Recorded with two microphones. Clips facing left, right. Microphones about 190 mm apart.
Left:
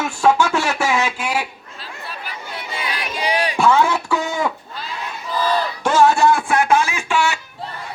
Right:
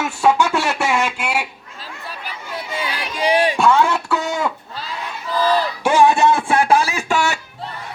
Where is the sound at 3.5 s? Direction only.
5° left (ahead or behind).